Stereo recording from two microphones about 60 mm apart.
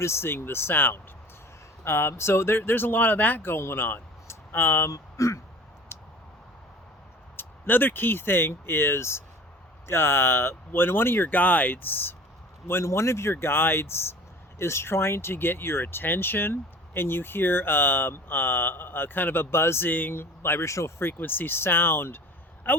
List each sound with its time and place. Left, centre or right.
0.0 s speech: left
7.3 s speech: left
12.6 s speech: left
13.3 s speech: left
19.9 s speech: left
21.0 s speech: left